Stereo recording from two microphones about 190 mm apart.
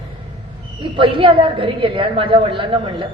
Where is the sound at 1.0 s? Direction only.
25° right (ahead or behind).